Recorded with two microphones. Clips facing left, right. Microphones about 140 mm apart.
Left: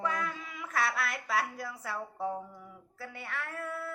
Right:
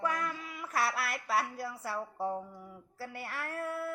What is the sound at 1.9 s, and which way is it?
Speech, 30° right (ahead or behind).